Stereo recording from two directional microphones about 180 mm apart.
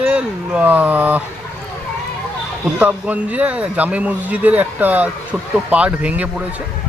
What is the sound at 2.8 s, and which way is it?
Speech, 10° right (ahead or behind).